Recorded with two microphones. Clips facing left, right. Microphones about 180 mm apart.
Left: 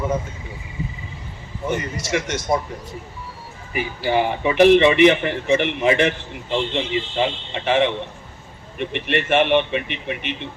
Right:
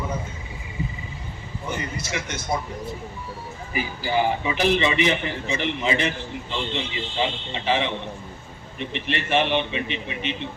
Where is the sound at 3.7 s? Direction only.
60° left (ahead or behind).